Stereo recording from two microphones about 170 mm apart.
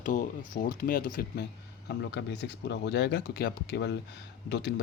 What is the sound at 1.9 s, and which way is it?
Speech, 75° left (ahead or behind).